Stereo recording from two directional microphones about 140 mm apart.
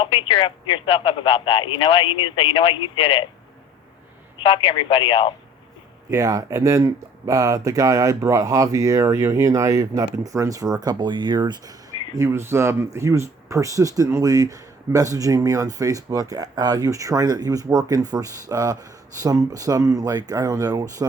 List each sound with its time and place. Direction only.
0.0 s speech: 40° left (ahead or behind)
4.4 s speech: 40° left (ahead or behind)
6.1 s speech: 25° right (ahead or behind)